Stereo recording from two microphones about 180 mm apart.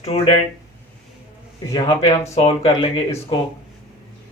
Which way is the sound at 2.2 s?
35° left (ahead or behind).